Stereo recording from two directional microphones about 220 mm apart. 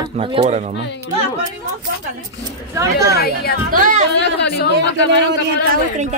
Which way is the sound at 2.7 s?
15° right (ahead or behind).